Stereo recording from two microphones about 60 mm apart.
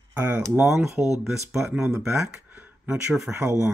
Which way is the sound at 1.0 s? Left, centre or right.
Right.